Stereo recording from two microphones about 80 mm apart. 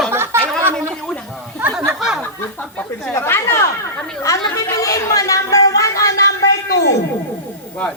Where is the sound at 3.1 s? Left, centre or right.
Left.